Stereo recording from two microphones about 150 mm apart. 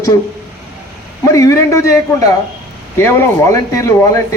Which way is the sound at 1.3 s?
20° left (ahead or behind).